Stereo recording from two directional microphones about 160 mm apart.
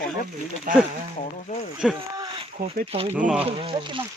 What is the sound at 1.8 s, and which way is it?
Speech, centre (ahead or behind).